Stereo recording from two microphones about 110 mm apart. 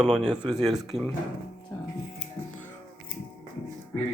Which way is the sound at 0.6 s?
5° right (ahead or behind).